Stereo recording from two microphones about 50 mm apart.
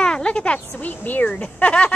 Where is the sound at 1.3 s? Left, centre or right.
Left.